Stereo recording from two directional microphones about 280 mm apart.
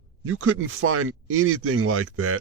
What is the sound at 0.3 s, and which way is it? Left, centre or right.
Speech, right.